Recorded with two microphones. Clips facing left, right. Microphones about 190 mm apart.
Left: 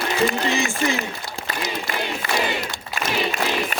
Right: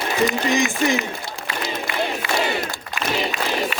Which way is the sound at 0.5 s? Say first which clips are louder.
Right 3 dB; 15° right (ahead or behind).